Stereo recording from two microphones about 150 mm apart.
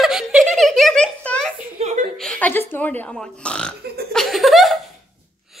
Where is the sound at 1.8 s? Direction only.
50° right (ahead or behind).